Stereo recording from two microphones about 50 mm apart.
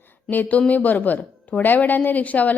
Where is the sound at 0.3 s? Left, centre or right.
Left.